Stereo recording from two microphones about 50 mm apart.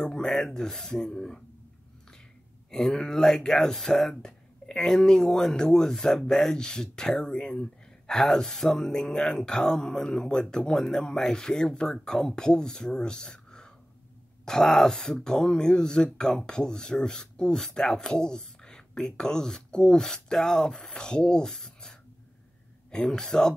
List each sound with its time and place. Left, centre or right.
0.0 s a sound: centre
0.3 s speech: centre
2.7 s speech: centre